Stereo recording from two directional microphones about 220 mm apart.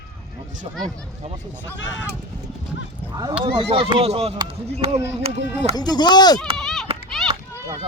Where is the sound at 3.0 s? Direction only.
15° right (ahead or behind).